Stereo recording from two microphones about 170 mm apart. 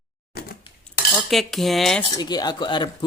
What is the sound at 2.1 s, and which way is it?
Speech, 25° left (ahead or behind).